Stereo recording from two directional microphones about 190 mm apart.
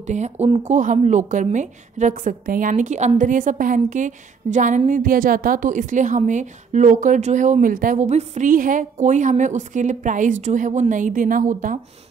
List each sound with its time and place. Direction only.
0.0 s speech: 40° right (ahead or behind)